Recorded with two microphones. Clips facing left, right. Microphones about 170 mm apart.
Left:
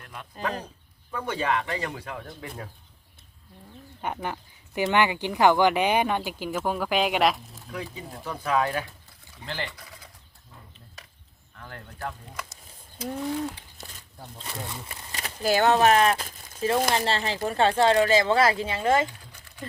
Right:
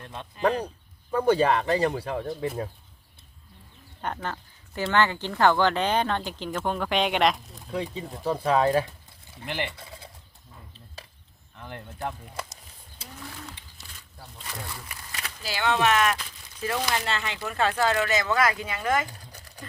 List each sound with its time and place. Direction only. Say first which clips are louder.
0.0 s a sound: right 3 dB; 25° right (ahead or behind)
1.1 s speech: right 6 dB; 35° right (ahead or behind)
4.0 s speech: left 1 dB; 10° left (ahead or behind)
7.7 s speech: right 5 dB; 25° right (ahead or behind)
9.3 s a sound: right 3 dB; 20° right (ahead or behind)
11.5 s speech: right 3 dB; 20° right (ahead or behind)
14.2 s speech: left 2 dB; 25° left (ahead or behind)
15.4 s speech: left 5 dB; 45° left (ahead or behind)
16.6 s speech: left 5 dB; 30° left (ahead or behind)